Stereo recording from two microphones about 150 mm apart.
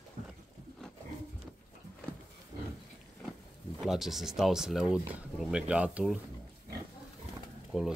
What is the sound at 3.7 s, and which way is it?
Speech, 5° right (ahead or behind).